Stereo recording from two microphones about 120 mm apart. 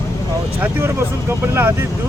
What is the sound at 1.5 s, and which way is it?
Speech, 20° right (ahead or behind).